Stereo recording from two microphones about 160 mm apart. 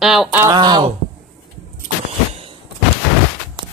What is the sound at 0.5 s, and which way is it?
Speech, 30° right (ahead or behind).